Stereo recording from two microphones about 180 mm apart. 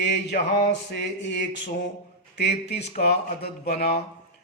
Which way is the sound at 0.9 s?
75° left (ahead or behind).